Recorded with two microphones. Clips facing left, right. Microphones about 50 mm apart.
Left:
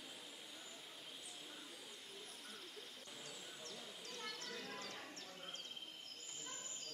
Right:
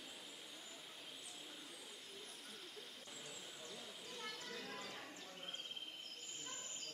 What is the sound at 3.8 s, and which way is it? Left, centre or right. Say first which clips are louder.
Clip-clop: even; centre.